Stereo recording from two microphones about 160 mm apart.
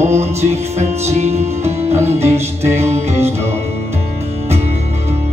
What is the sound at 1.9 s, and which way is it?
Music, 15° right (ahead or behind).